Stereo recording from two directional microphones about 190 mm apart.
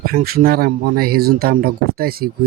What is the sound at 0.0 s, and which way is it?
Speech, 50° right (ahead or behind).